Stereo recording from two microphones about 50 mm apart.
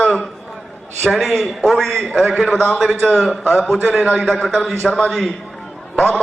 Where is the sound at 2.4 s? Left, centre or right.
Centre.